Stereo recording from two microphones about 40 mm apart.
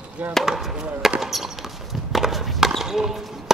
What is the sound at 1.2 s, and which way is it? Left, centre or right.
Horse, centre.